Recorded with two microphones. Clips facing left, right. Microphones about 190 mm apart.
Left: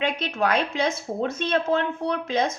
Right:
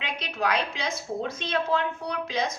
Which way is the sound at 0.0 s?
50° left (ahead or behind).